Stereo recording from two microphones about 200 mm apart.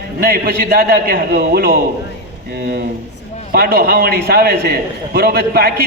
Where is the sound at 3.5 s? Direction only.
50° right (ahead or behind).